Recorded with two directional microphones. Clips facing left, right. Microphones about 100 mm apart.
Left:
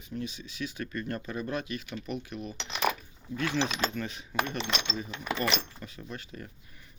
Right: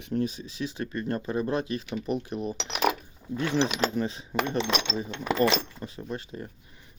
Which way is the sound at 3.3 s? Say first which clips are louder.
Right 4 dB; 30° right (ahead or behind).